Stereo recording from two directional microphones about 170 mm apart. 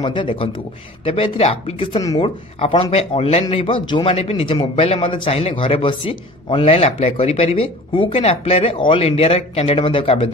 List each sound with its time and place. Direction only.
0.0 s a man's voice: 30° left (ahead or behind)